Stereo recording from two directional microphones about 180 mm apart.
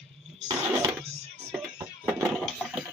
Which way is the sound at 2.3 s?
Centre (ahead or behind).